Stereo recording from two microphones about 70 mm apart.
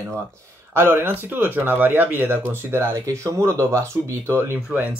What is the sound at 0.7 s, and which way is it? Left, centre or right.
Speech, right.